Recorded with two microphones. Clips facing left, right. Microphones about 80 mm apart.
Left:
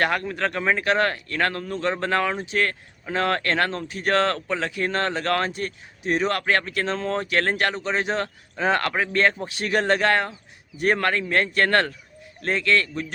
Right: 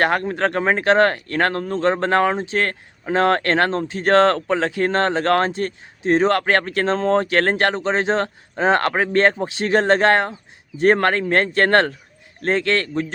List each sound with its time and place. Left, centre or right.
0.0 s speech: right